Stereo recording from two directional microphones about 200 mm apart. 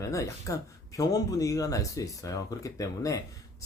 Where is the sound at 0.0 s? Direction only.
15° left (ahead or behind).